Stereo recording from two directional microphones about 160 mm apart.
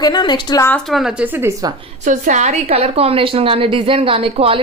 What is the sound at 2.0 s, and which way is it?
A woman's voice, 50° right (ahead or behind).